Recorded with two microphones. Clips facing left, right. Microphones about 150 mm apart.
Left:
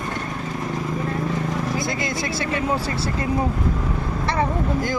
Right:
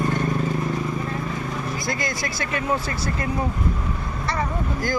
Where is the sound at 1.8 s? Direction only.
25° left (ahead or behind).